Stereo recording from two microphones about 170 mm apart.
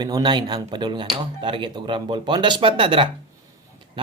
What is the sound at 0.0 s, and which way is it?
Speech, 25° right (ahead or behind).